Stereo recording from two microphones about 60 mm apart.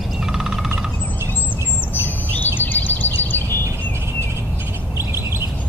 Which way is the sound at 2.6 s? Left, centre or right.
Left.